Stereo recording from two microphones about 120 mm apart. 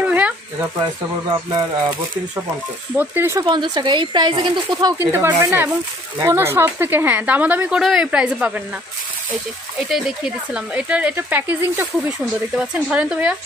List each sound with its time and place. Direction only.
0.0 s a sound: 15° right (ahead or behind)
1.3 s speech: 45° right (ahead or behind)
3.0 s speech: 20° right (ahead or behind)
3.4 s a woman's voice: 40° right (ahead or behind)
4.9 s speech: 20° right (ahead or behind)
9.8 s speech: 5° right (ahead or behind)